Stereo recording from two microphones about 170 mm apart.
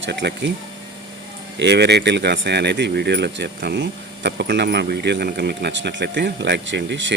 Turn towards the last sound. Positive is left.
turn(degrees=-90)